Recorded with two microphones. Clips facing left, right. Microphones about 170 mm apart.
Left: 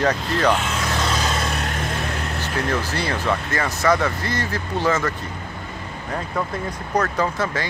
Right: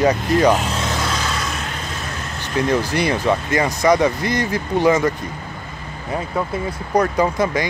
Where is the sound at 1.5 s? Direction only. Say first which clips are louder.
Left 2 dB; 55° left (ahead or behind).